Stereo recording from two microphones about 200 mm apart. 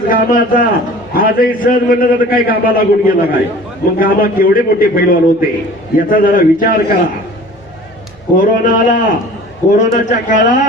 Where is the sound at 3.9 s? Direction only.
45° left (ahead or behind).